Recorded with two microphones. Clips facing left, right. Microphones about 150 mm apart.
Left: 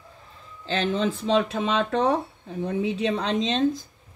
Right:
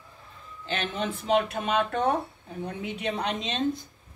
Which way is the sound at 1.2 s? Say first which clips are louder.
Right 1 dB; 90° left.